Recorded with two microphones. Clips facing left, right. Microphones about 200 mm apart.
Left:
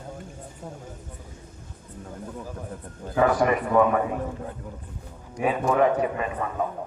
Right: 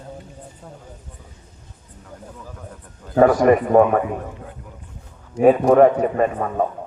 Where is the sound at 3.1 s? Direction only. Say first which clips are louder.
Right 7 dB; 45° right (ahead or behind).